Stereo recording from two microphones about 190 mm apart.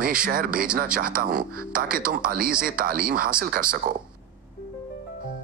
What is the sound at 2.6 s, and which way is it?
Speech, 50° right (ahead or behind).